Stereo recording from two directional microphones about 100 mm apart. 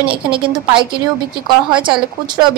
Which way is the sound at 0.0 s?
60° right (ahead or behind).